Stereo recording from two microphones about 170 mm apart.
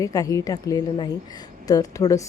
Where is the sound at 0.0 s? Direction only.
20° left (ahead or behind).